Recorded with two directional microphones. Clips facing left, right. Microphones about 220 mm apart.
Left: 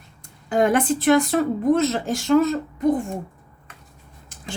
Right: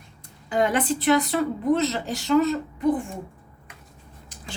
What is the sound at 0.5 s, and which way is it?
Speech, 50° left (ahead or behind).